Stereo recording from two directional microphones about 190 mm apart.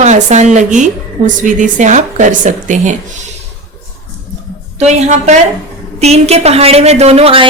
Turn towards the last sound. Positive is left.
turn(degrees=-30)  # may be behind; listen again after turning